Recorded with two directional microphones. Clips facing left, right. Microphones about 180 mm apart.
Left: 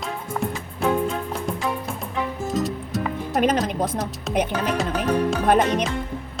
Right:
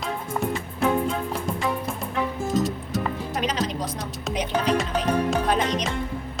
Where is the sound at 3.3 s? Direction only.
55° left (ahead or behind).